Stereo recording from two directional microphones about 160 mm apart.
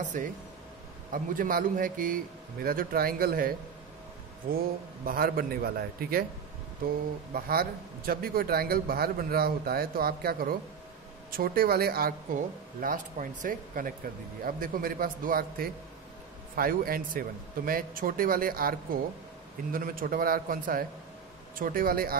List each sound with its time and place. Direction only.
0.0 s speech: 50° right (ahead or behind); by 3.5 s 65° right (ahead or behind)
5.0 s a man's voice: 65° right (ahead or behind)
7.3 s a man's voice: 65° right (ahead or behind)